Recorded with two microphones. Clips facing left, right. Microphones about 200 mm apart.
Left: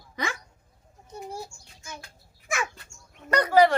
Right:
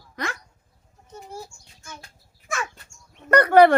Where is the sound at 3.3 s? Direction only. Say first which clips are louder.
Right 5 dB; 60° right (ahead or behind).